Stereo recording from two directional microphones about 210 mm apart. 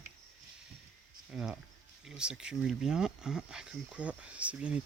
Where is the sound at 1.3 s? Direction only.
5° right (ahead or behind).